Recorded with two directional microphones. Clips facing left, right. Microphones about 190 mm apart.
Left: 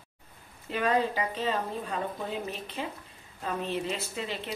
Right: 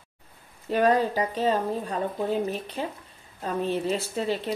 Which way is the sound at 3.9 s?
35° right (ahead or behind).